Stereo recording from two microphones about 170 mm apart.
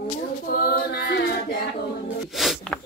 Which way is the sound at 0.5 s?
65° left (ahead or behind).